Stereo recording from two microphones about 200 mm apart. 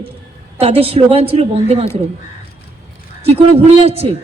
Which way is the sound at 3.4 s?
30° right (ahead or behind).